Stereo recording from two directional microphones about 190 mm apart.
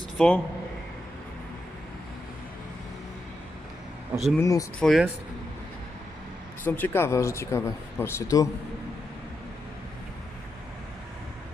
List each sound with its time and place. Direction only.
0.2 s speech: 5° left (ahead or behind)
4.4 s speech: 15° left (ahead or behind)
4.8 s speech: centre (ahead or behind)
6.7 s speech: 10° left (ahead or behind)